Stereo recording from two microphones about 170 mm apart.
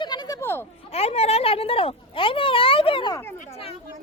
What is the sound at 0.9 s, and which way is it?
Speech, 35° left (ahead or behind).